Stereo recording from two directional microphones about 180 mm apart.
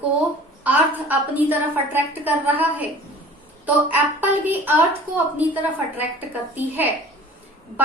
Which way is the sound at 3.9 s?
10° right (ahead or behind).